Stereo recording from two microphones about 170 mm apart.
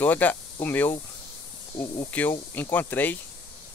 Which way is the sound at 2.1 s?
10° left (ahead or behind).